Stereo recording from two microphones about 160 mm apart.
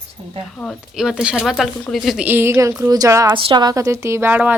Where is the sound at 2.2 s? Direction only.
15° right (ahead or behind).